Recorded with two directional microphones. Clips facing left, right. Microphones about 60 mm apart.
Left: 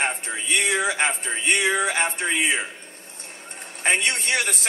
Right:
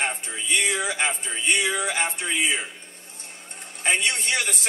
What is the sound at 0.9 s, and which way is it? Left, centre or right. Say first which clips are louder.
A man's voice: left 2 dB; left.